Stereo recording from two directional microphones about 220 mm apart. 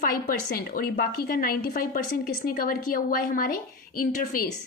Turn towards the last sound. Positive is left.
turn(degrees=40)  # may be behind; listen again after turning